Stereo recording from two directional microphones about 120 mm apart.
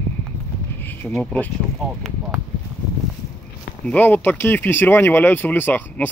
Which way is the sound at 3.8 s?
15° left (ahead or behind).